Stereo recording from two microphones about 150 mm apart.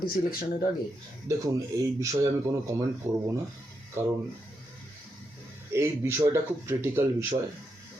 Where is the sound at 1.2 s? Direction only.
20° right (ahead or behind).